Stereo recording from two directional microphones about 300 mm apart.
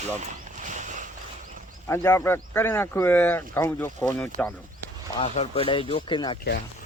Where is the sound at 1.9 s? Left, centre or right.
Centre.